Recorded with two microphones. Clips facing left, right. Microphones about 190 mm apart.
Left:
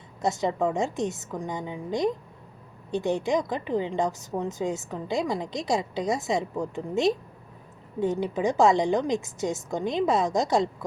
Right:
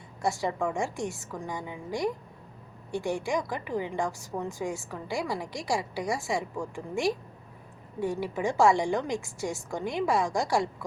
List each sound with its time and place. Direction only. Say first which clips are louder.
0.2 s a woman's voice: left 3 dB; 20° left (ahead or behind)